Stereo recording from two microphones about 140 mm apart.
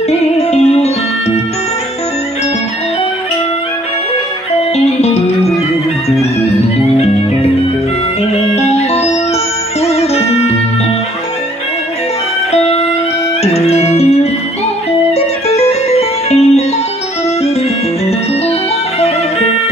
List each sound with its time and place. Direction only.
0.1 s music: 50° left (ahead or behind)
4.7 s music: 50° left (ahead or behind)
8.5 s music: 50° left (ahead or behind)
12.5 s music: 50° left (ahead or behind)